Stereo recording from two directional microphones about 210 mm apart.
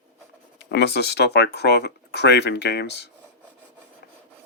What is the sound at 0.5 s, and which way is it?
Speech, 55° left (ahead or behind).